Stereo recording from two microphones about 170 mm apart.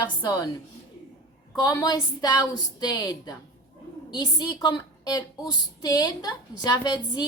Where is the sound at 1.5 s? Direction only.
20° left (ahead or behind).